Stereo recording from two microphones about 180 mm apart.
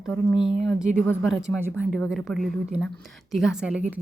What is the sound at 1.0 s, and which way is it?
Speech, 10° left (ahead or behind).